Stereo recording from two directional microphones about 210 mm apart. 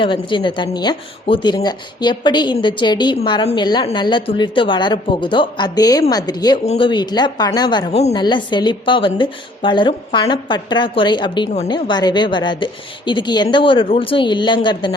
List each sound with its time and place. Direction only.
0.0 s speech: 25° left (ahead or behind)